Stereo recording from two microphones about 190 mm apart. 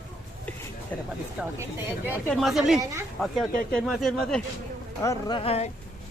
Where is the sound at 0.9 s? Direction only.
10° left (ahead or behind).